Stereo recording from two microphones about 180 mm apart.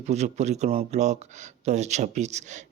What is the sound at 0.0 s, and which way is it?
Speech, 40° right (ahead or behind).